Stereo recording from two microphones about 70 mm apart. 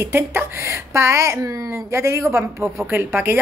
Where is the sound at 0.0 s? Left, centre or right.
Right.